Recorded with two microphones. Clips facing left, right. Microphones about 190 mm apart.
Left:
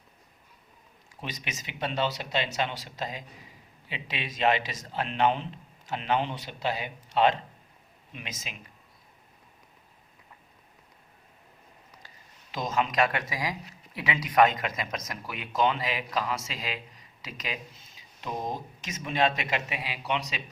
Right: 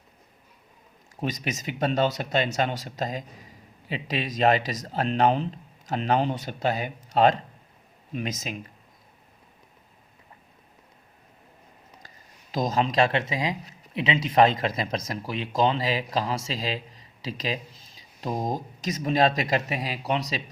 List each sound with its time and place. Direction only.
1.1 s speech: 45° right (ahead or behind)
12.0 s speech: 40° right (ahead or behind)